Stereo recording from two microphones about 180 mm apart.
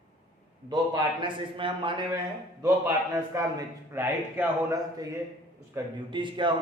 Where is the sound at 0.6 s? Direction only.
25° right (ahead or behind).